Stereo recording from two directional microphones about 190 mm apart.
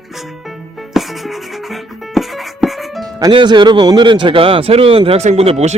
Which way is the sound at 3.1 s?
20° right (ahead or behind).